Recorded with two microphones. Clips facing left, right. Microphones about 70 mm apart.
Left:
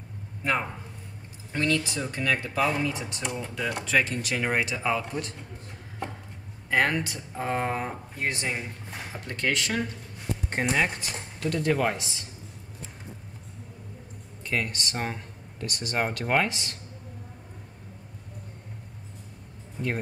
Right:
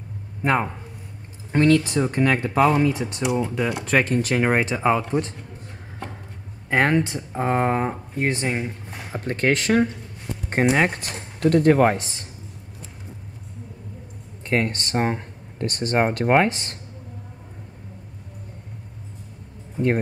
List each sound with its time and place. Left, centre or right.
0.4 s speech: right
6.7 s speech: right
14.4 s speech: right